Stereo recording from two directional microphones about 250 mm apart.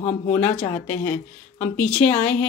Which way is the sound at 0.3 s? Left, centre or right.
Centre.